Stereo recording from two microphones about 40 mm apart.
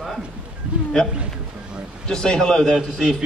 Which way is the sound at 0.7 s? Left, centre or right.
Right.